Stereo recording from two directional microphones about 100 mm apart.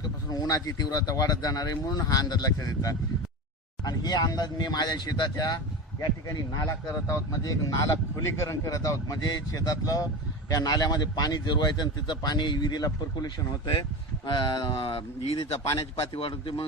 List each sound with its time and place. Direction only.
0.3 s a man's voice: 40° left (ahead or behind)
6.5 s a man's voice: 30° left (ahead or behind); by 14.7 s 50° left (ahead or behind)
14.7 s speech: 70° left (ahead or behind)
16.0 s a man's voice: 60° left (ahead or behind)